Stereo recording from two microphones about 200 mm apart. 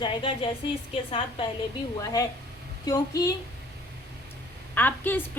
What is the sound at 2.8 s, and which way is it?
Speech, 20° left (ahead or behind).